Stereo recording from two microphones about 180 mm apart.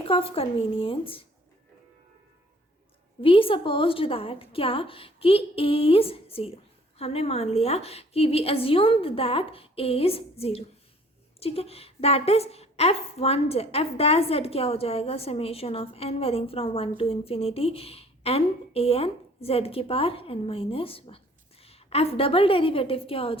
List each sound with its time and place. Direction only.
0.1 s a woman's voice: 30° left (ahead or behind)
3.2 s a woman's voice: 30° left (ahead or behind)